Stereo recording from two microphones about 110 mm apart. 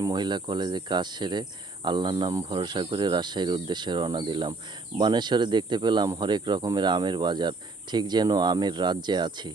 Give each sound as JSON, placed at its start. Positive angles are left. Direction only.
{"t": 0.0, "sound": "speech", "side_deg": -40}